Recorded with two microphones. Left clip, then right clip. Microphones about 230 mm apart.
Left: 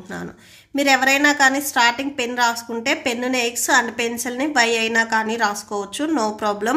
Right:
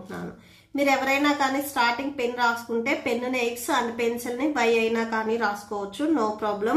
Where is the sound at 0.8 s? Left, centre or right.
Left.